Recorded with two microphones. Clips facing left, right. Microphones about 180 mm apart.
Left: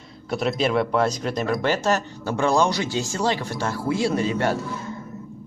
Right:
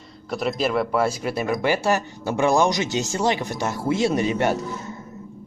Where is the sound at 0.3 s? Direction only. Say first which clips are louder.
Left 1 dB; centre (ahead or behind); by 4.6 s 20° right (ahead or behind).